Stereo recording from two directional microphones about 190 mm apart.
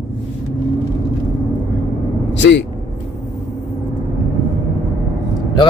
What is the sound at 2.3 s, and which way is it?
Vehicle, 70° left (ahead or behind).